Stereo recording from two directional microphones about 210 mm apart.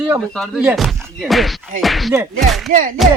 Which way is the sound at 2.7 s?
40° right (ahead or behind).